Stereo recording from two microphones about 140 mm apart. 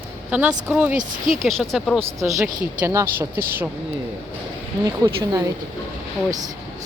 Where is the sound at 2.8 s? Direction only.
20° right (ahead or behind).